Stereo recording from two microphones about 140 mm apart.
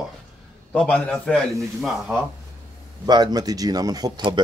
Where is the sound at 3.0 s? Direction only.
30° right (ahead or behind).